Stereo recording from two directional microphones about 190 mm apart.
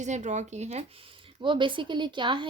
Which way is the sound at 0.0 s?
40° right (ahead or behind).